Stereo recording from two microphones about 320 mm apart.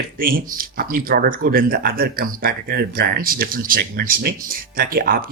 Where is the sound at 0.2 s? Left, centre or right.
Right.